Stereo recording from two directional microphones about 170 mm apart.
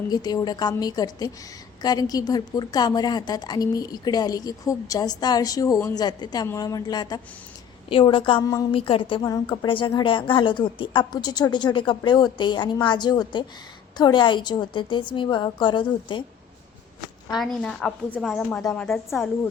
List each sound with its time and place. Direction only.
0.1 s a woman's voice: 25° left (ahead or behind)
17.3 s a woman's voice: centre (ahead or behind)